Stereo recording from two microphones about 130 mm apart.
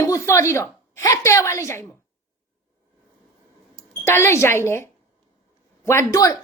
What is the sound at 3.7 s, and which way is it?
Speech, 20° left (ahead or behind).